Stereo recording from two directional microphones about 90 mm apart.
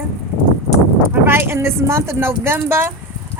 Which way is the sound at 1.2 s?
25° right (ahead or behind).